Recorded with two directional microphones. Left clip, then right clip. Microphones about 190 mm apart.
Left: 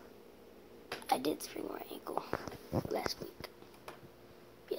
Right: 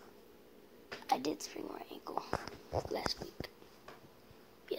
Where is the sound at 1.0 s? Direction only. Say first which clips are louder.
Left 1 dB; 5° right (ahead or behind).